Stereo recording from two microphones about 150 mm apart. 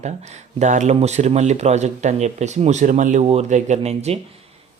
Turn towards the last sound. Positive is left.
turn(degrees=-45)  # may be behind; listen again after turning